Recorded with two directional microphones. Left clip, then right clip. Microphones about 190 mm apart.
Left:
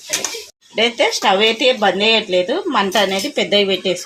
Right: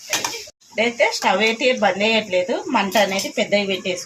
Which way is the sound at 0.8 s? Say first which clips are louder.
Left 3 dB; 40° left (ahead or behind).